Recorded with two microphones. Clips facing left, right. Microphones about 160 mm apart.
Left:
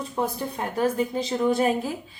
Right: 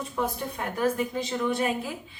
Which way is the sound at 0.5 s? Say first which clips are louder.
Left 3 dB; 30° left (ahead or behind).